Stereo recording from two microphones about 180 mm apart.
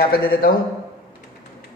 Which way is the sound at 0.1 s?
55° left (ahead or behind).